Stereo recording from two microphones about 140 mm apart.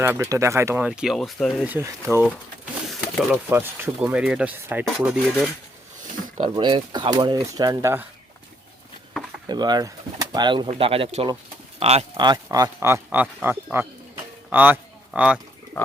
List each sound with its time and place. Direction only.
0.0 s speech: 15° right (ahead or behind)
0.9 s speech: 5° right (ahead or behind)
1.6 s speech: 15° right (ahead or behind)
2.8 s a sound: centre (ahead or behind)
3.5 s speech: 15° right (ahead or behind)
6.6 s speech: 35° right (ahead or behind)
9.5 s speech: 30° right (ahead or behind); by 12.0 s 45° right (ahead or behind)
12.1 s speech: 30° right (ahead or behind); by 15.4 s 10° right (ahead or behind)